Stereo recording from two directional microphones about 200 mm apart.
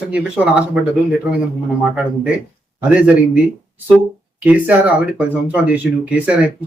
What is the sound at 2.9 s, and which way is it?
Speech, 5° right (ahead or behind).